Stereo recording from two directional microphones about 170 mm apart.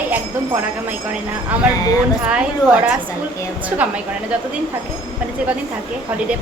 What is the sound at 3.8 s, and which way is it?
Speech, 10° right (ahead or behind).